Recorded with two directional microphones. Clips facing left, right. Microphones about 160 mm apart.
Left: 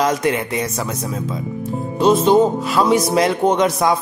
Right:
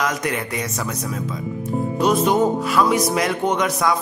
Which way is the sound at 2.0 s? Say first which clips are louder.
Left 5 dB; 25° left (ahead or behind).